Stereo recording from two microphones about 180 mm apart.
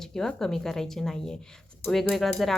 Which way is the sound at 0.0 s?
5° left (ahead or behind).